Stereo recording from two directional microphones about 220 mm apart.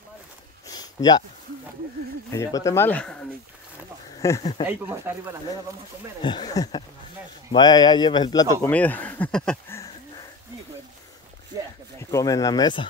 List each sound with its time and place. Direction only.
0.7 s a sound: 20° left (ahead or behind)
2.3 s speech: 15° left (ahead or behind)
4.2 s speech: 15° left (ahead or behind)
4.6 s speech: 10° right (ahead or behind)
6.2 s speech: 20° left (ahead or behind)
12.0 s speech: 15° left (ahead or behind)